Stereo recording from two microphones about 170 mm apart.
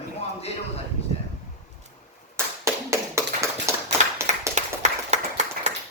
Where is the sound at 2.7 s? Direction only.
15° right (ahead or behind).